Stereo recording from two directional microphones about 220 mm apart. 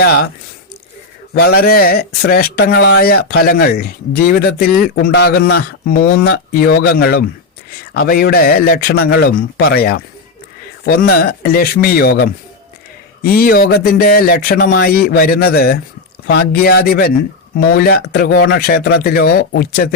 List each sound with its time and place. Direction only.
1.3 s speech: 50° left (ahead or behind)